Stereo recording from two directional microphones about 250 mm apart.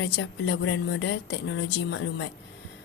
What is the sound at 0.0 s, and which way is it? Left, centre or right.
Speech, left.